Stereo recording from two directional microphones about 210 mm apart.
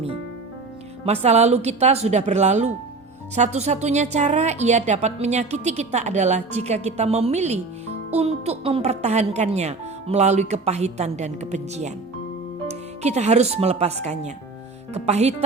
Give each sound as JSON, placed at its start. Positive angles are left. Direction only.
{"t": 1.0, "sound": "a woman's voice", "side_deg": -30}